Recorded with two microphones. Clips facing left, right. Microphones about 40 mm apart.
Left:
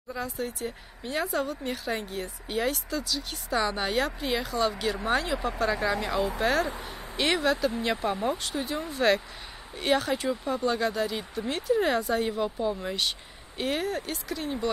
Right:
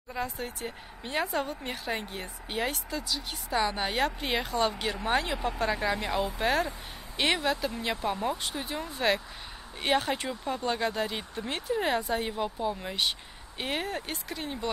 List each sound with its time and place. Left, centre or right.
0.1 s speech: right
4.2 s speech: right
5.8 s speech: centre
7.8 s speech: centre
8.5 s speech: centre
9.8 s speech: right
11.7 s speech: centre
13.6 s speech: right